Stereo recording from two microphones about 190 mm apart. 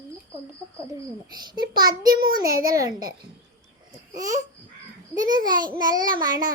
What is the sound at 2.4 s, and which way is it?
Speech, 50° right (ahead or behind).